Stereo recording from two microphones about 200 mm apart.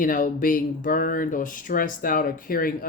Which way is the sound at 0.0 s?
40° left (ahead or behind).